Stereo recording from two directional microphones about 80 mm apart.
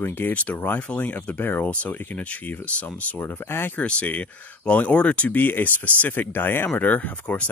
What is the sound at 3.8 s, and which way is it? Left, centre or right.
Speech, centre.